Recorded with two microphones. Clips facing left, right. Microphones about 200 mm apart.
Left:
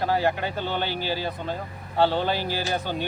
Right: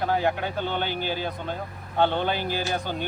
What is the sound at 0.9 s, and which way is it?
Speech, 55° right (ahead or behind).